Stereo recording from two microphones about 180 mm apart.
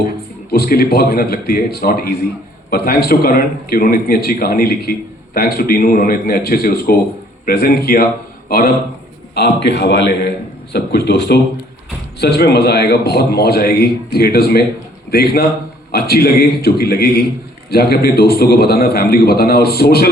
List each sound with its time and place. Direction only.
0.5 s a man's voice: 60° left (ahead or behind)
9.3 s a man's voice: 70° left (ahead or behind)